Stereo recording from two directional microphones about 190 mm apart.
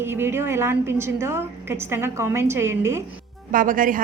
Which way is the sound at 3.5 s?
45° right (ahead or behind).